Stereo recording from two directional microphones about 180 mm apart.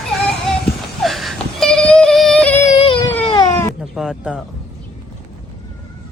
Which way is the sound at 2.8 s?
30° left (ahead or behind).